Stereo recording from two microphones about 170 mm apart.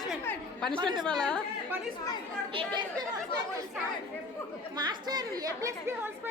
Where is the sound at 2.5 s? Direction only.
30° right (ahead or behind).